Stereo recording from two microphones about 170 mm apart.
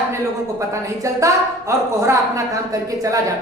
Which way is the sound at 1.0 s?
20° right (ahead or behind).